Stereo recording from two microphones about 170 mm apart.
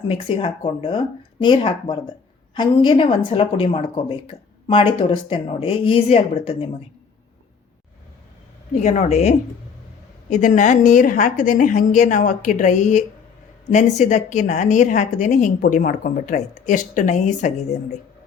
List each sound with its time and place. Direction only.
0.1 s speech: 35° left (ahead or behind)
8.8 s a woman's voice: 40° left (ahead or behind)